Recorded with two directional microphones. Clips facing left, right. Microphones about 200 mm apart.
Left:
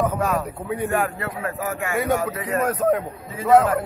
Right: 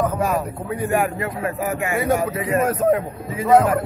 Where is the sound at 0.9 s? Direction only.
15° right (ahead or behind).